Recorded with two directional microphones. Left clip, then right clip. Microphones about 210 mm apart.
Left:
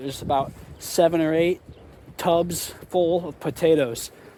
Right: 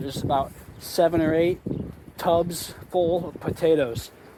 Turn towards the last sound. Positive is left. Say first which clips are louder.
# left 1 dB
turn(degrees=50)  # may be behind; listen again after turning